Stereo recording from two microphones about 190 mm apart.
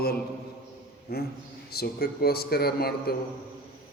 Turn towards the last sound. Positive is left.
turn(degrees=55)  # may be behind; listen again after turning